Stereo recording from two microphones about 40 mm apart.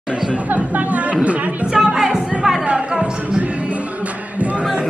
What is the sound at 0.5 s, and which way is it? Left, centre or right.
Speech, right.